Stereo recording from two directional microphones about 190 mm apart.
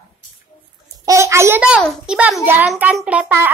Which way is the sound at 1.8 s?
Centre (ahead or behind).